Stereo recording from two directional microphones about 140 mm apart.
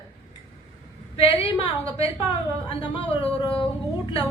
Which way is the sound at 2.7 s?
40° left (ahead or behind).